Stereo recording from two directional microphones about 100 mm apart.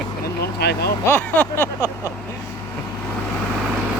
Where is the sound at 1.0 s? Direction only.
20° left (ahead or behind).